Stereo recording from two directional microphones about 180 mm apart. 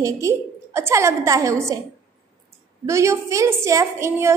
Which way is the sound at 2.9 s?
15° right (ahead or behind).